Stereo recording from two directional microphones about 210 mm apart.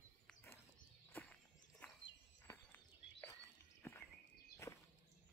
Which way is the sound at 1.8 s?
10° left (ahead or behind).